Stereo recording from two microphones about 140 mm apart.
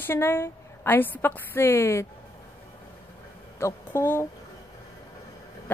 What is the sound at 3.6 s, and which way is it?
Speech, 20° left (ahead or behind).